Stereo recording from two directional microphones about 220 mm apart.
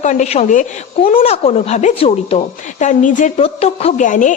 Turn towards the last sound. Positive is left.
turn(degrees=35)  # may be behind; listen again after turning